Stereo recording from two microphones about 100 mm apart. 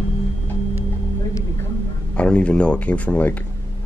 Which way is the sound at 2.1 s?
10° left (ahead or behind).